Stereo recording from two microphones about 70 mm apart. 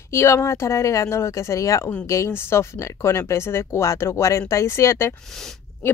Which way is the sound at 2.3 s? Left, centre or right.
Left.